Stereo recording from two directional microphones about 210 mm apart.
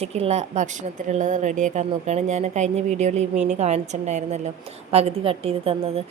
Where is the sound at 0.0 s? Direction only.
30° right (ahead or behind).